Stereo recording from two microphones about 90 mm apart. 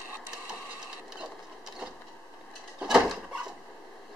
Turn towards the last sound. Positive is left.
turn(degrees=-5)  # may be behind; listen again after turning